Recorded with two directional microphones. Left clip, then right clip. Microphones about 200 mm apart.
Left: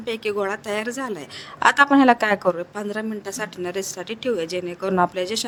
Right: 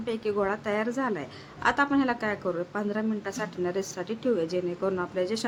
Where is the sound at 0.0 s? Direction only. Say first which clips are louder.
Left 4 dB; 40° left (ahead or behind).